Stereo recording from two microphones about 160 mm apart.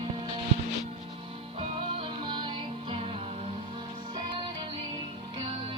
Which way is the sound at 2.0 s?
30° right (ahead or behind).